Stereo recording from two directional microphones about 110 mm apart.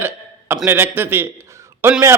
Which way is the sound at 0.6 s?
20° right (ahead or behind).